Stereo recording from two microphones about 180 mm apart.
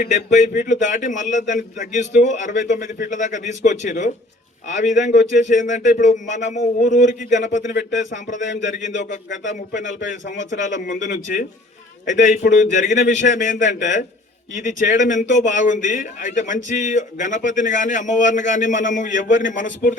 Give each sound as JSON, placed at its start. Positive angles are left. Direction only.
{"t": 0.0, "sound": "speech", "side_deg": 40}
{"t": 8.4, "sound": "speech", "side_deg": 85}
{"t": 10.8, "sound": "speech", "side_deg": 45}